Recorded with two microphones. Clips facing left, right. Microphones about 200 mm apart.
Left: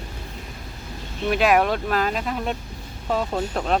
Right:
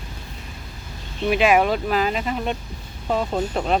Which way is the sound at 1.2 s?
Centre (ahead or behind).